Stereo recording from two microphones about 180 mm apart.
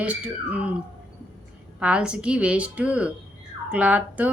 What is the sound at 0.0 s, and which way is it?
Speech, 10° right (ahead or behind).